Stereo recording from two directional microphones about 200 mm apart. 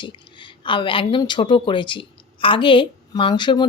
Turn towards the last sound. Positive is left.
turn(degrees=20)  # may be behind; listen again after turning